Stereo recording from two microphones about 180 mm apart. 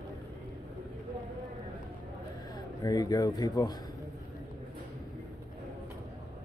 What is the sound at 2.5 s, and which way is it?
Speech, 20° left (ahead or behind).